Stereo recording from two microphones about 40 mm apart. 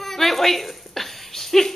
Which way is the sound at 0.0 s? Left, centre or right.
Centre.